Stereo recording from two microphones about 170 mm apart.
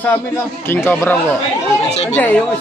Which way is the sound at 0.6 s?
15° left (ahead or behind).